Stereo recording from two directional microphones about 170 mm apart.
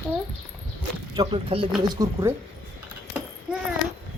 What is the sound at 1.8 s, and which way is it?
Speech, 25° right (ahead or behind).